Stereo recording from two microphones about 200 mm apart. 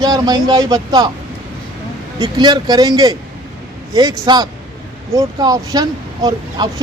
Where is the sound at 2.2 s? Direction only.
20° right (ahead or behind).